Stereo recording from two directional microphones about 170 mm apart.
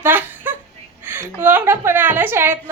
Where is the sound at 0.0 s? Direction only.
10° right (ahead or behind).